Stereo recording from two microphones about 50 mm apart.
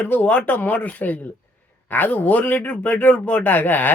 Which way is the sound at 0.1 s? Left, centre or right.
Left.